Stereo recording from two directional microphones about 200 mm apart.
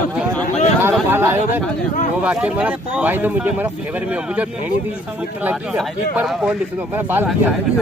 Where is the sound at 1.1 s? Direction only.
10° right (ahead or behind).